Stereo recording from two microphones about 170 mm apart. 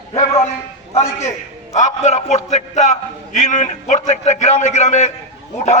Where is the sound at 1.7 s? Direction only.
40° left (ahead or behind).